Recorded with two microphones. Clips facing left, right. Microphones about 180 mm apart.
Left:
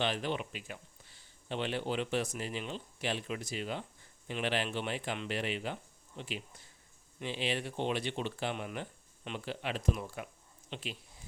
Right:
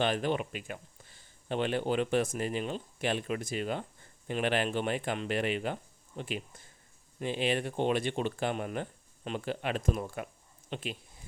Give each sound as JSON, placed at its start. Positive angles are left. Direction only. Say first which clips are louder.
{"t": 0.0, "sound": "speech", "louder": "right 4 dB", "side_deg": -50}